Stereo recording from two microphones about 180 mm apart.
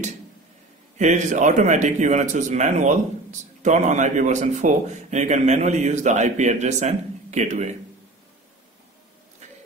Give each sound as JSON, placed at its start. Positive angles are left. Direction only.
{"t": 0.9, "sound": "a man's voice", "side_deg": -40}